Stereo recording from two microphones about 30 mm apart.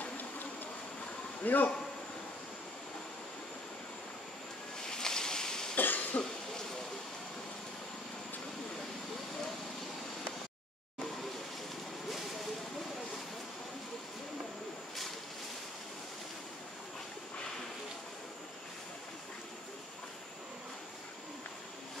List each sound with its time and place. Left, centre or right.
0.0 s train: left
1.4 s a man's voice: left
4.8 s a sound: centre
5.8 s cough: left